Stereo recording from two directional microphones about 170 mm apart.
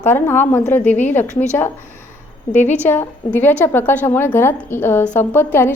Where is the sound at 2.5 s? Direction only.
45° left (ahead or behind).